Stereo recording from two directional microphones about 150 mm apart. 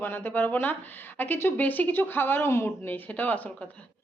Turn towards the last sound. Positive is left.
turn(degrees=10)  # may be behind; listen again after turning